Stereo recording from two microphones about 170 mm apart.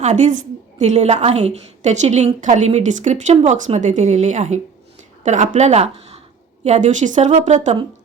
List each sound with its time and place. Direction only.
0.0 s a woman's voice: 45° right (ahead or behind)